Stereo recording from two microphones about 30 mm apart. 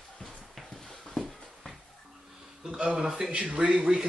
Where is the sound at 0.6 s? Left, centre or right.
Centre.